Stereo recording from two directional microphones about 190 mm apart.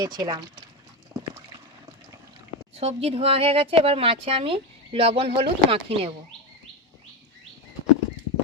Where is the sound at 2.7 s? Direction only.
30° right (ahead or behind).